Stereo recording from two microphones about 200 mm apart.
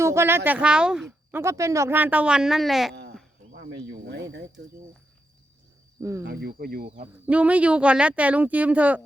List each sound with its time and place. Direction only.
0.0 s speech: 15° right (ahead or behind)
2.9 s livestock: 55° right (ahead or behind)
3.7 s speech: 55° right (ahead or behind)
6.0 s speech: 15° right (ahead or behind)
6.2 s speech: 50° right (ahead or behind)
7.3 s speech: 5° right (ahead or behind)